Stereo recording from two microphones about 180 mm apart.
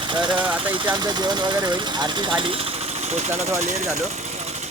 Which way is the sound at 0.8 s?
25° right (ahead or behind).